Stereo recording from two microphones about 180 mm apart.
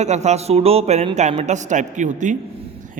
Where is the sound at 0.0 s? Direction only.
40° right (ahead or behind).